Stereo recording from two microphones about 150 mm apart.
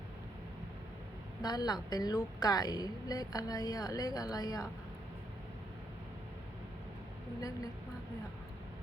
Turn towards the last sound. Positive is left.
turn(degrees=25)  # may be behind; listen again after turning